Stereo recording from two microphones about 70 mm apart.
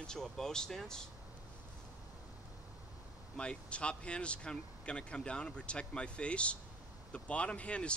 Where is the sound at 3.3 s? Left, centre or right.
Centre.